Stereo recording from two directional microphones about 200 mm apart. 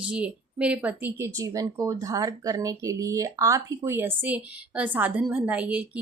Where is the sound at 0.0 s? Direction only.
5° right (ahead or behind).